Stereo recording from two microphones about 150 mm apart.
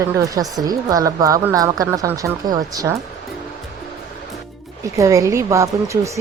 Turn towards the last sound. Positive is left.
turn(degrees=-20)  # may be behind; listen again after turning